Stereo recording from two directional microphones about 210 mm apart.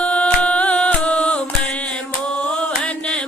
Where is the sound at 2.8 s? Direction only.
5° left (ahead or behind).